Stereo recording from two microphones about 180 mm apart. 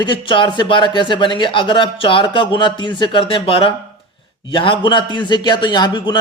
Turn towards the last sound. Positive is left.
turn(degrees=25)  # may be behind; listen again after turning